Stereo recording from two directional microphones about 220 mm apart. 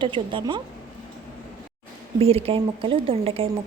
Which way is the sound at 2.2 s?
25° right (ahead or behind).